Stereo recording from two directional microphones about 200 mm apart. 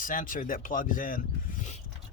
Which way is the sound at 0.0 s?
40° left (ahead or behind).